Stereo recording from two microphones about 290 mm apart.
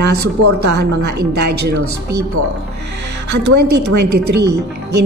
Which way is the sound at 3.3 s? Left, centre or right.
Right.